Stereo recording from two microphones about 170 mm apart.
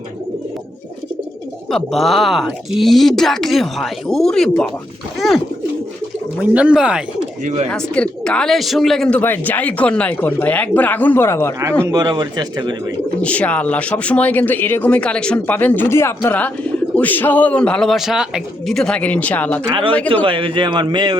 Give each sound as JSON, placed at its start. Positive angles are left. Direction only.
{"t": 1.7, "sound": "speech", "side_deg": 0}
{"t": 6.4, "sound": "speech", "side_deg": -10}
{"t": 7.7, "sound": "speech", "side_deg": 5}
{"t": 11.8, "sound": "speech", "side_deg": -20}
{"t": 13.2, "sound": "speech", "side_deg": 10}
{"t": 20.2, "sound": "speech", "side_deg": -30}